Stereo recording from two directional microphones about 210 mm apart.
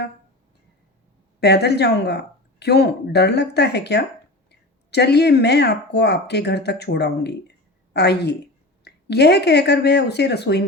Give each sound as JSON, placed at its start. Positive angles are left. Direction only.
{"t": 1.4, "sound": "speech", "side_deg": 50}